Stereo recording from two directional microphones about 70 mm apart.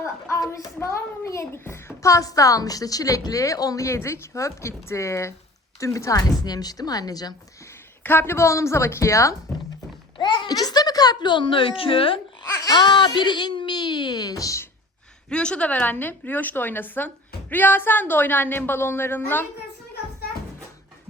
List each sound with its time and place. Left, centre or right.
0.0 s a child's voice: left
8.0 s a child's voice: left
10.2 s a sound: left
12.6 s speech: left
15.3 s speech: centre